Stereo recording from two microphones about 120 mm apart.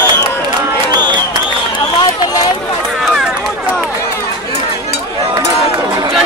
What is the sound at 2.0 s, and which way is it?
Run, 35° left (ahead or behind).